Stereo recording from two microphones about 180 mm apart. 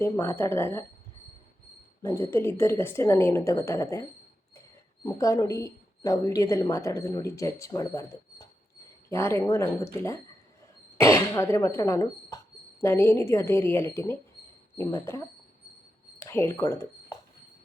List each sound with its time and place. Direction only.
0.0 s a woman's voice: 15° left (ahead or behind)
2.0 s a woman's voice: 15° left (ahead or behind)
5.0 s a woman's voice: 20° left (ahead or behind)
16.2 s speech: 10° left (ahead or behind)